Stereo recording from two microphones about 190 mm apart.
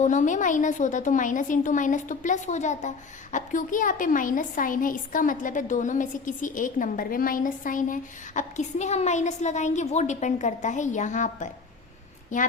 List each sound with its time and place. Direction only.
0.0 s a woman's voice: 40° left (ahead or behind)